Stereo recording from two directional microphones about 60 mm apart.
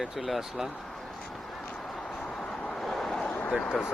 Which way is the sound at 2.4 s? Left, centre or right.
Centre.